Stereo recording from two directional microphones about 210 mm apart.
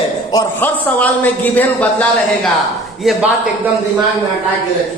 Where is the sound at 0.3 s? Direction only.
15° left (ahead or behind).